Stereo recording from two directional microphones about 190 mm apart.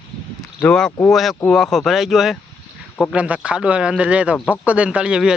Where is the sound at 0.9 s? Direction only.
15° left (ahead or behind).